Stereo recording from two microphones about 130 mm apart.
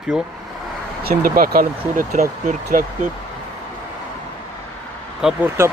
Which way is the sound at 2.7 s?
85° right.